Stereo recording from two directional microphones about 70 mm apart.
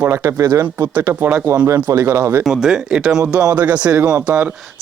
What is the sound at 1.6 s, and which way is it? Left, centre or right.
Speech, right.